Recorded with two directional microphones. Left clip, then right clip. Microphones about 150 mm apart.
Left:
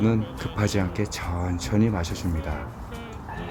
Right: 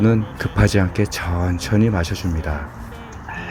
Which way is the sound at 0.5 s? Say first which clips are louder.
Right 8 dB; 25° right (ahead or behind).